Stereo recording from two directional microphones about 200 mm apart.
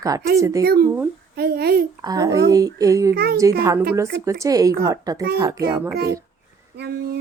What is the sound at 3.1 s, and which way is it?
Speech, 50° right (ahead or behind).